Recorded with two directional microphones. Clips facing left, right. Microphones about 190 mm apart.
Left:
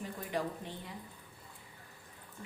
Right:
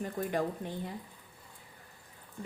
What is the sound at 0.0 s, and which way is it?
Speech, 50° right (ahead or behind).